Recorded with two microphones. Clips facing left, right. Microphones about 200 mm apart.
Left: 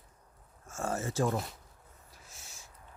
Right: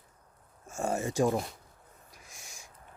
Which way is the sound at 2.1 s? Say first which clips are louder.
Right 2 dB; 15° right (ahead or behind).